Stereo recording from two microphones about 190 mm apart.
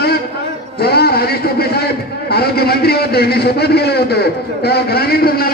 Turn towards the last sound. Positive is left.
turn(degrees=55)  # may be behind; listen again after turning